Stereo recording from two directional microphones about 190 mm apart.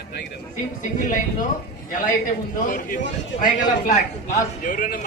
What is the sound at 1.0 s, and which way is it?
Speech, 45° left (ahead or behind).